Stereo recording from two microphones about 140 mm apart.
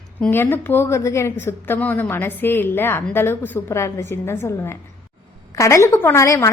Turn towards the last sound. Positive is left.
turn(degrees=20)  # may be behind; listen again after turning